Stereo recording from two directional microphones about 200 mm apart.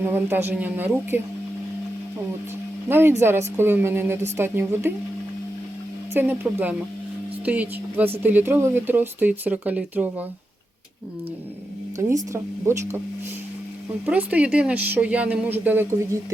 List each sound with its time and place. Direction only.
0.0 s speech: 10° right (ahead or behind)
2.9 s speech: 10° right (ahead or behind)
6.1 s speech: 10° right (ahead or behind)
11.9 s speech: 15° right (ahead or behind)
14.0 s speech: 5° right (ahead or behind)